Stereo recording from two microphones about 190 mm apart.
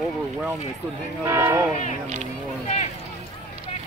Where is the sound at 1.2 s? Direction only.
15° right (ahead or behind).